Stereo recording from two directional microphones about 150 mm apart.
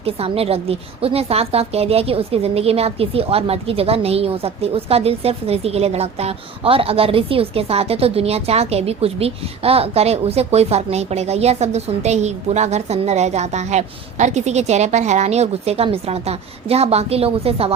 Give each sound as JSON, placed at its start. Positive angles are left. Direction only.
{"t": 0.0, "sound": "a woman's voice", "side_deg": -40}